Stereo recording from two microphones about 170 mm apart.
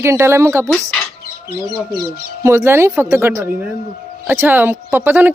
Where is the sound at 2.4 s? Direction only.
15° right (ahead or behind).